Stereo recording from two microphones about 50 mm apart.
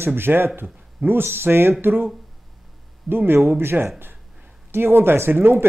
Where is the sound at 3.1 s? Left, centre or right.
Right.